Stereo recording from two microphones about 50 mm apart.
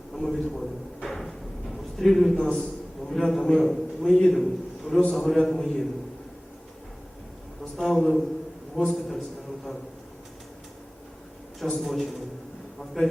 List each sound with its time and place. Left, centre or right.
0.1 s a man's voice: centre
1.0 s a sound: centre
4.9 s a man's voice: centre
7.8 s a man's voice: centre
11.6 s a man's voice: centre